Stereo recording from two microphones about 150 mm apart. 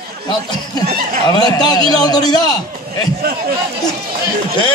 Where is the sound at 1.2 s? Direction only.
25° left (ahead or behind).